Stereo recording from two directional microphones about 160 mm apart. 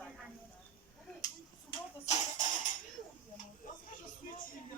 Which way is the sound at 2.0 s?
45° left (ahead or behind).